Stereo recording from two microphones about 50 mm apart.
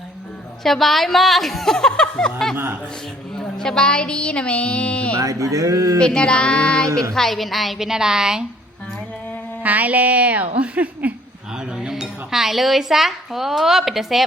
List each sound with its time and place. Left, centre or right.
0.6 s speech: centre
3.6 s music: centre
5.1 s speech: right
6.0 s music: centre
7.1 s speech: centre
9.6 s a woman's voice: right
11.5 s speech: centre